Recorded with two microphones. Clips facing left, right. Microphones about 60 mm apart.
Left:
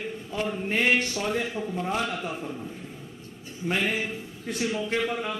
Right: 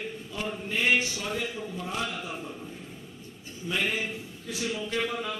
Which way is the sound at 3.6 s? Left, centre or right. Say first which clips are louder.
Left 3 dB; left.